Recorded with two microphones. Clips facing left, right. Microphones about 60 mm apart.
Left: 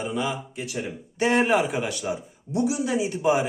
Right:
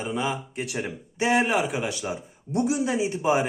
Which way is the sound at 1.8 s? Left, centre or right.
Centre.